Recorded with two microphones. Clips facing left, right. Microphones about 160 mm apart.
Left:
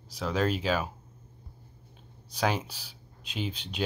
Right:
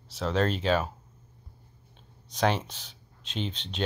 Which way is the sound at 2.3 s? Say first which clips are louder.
Right 2 dB; 5° left (ahead or behind).